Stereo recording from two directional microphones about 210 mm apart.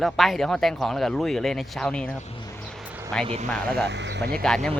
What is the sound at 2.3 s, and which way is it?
Speech, 25° left (ahead or behind).